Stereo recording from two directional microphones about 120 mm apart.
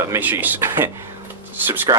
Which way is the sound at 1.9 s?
35° right (ahead or behind).